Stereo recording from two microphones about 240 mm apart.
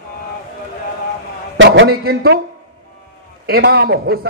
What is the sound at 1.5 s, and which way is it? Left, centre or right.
Speech, right.